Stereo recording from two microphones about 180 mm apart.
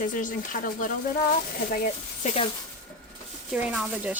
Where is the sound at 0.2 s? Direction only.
45° left (ahead or behind).